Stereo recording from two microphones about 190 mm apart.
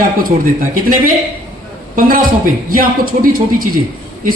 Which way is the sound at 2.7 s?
50° right (ahead or behind).